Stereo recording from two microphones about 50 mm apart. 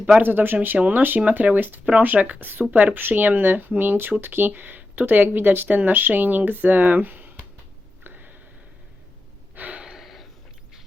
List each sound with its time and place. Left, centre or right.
0.2 s speech: right
8.0 s a sound: right
9.6 s gasp: right
9.8 s gasp: centre